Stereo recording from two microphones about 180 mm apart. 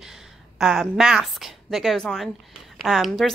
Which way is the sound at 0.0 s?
Centre (ahead or behind).